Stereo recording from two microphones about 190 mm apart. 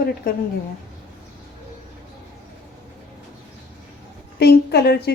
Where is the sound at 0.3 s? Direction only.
50° left (ahead or behind).